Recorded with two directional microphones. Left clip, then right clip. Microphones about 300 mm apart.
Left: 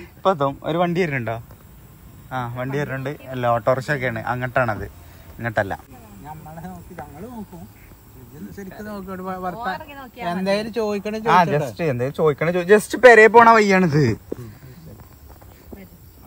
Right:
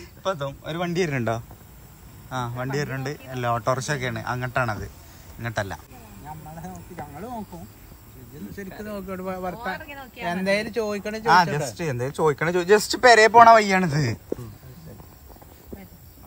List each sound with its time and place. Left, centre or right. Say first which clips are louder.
0.0 s speech: left 8 dB; centre
6.2 s a sound: left 2 dB; right
8.6 s speech: left 2 dB; centre
8.9 s speech: left 1 dB; centre
11.2 s speech: left 2 dB; centre